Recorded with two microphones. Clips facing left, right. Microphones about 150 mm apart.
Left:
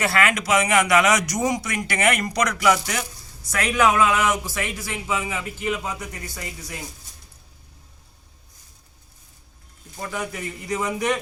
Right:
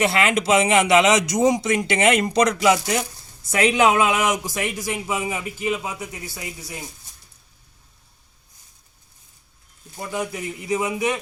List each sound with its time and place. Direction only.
0.0 s a man's voice: 20° right (ahead or behind); by 6.7 s 5° right (ahead or behind)
10.0 s a man's voice: 10° right (ahead or behind)